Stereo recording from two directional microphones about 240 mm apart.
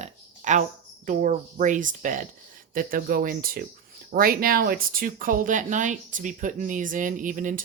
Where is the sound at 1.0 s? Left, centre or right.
Right.